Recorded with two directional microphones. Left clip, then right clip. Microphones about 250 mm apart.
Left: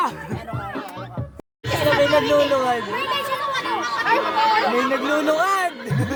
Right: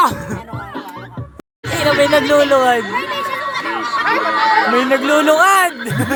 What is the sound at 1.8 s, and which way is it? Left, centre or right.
Speech, right.